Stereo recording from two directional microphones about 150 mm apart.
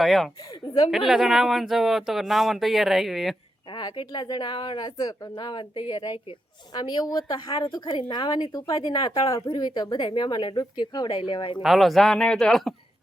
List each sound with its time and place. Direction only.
0.0 s speech: centre (ahead or behind)
3.7 s a woman's voice: 30° left (ahead or behind)
11.6 s speech: centre (ahead or behind)